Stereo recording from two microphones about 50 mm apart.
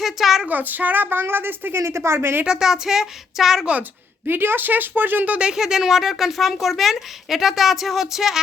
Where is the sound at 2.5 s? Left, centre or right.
Centre.